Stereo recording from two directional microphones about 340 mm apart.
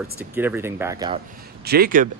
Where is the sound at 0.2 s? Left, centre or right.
Centre.